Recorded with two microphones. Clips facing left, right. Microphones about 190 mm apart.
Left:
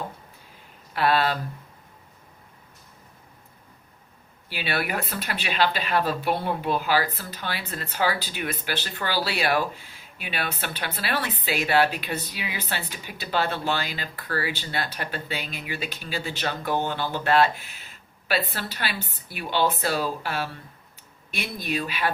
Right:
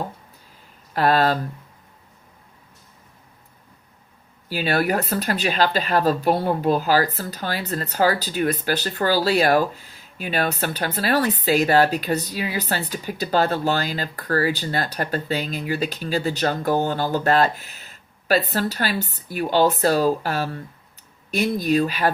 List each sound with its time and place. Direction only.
0.9 s speech: 40° right (ahead or behind)
4.4 s speech: 40° right (ahead or behind)